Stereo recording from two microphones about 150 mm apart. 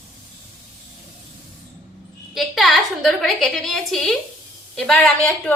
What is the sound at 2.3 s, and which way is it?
A woman's voice, centre (ahead or behind).